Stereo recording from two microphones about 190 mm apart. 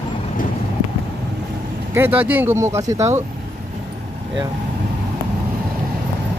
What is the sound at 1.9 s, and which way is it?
Speech, 10° right (ahead or behind).